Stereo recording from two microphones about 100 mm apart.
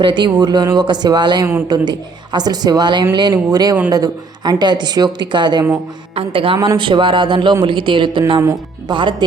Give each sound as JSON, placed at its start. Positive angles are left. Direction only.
{"t": 0.0, "sound": "a woman's voice", "side_deg": -50}
{"t": 6.1, "sound": "a woman's voice", "side_deg": -60}